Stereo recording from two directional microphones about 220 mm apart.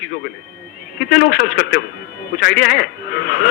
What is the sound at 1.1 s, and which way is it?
A man's voice, 45° left (ahead or behind).